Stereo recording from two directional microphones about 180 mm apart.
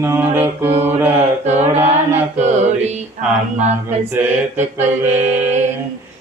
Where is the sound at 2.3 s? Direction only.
40° right (ahead or behind).